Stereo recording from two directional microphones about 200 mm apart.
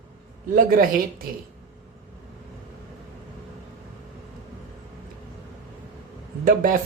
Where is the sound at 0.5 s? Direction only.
45° right (ahead or behind).